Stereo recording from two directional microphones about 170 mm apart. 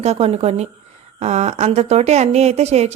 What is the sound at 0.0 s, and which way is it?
A woman's voice, 40° right (ahead or behind).